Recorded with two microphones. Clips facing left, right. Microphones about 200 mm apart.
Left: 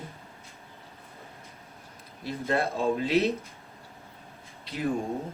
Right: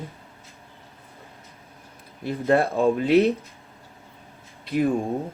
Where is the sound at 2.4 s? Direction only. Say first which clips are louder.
Right 7 dB; 55° right (ahead or behind).